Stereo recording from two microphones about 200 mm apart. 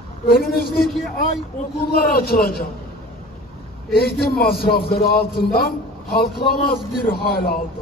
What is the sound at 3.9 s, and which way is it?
A man's voice, 50° left (ahead or behind).